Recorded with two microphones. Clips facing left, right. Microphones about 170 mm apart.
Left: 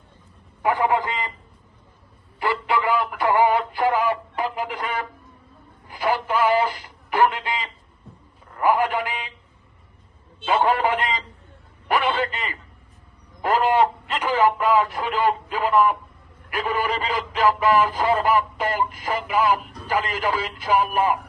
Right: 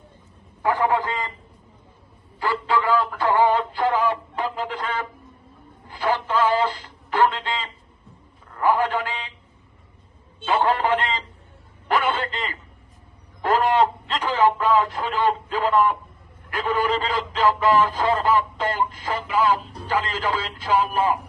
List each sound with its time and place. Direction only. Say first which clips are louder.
0.6 s a man's voice: even; 15° left (ahead or behind)
2.4 s synthetic singing: even; 20° left (ahead or behind)
5.9 s radio: even; 10° left (ahead or behind)
8.6 s speech: left 1 dB; 10° left (ahead or behind)
10.6 s speech: even; 10° left (ahead or behind)
11.9 s a sound: left 1 dB; 15° left (ahead or behind)
13.4 s speech: even; 10° left (ahead or behind)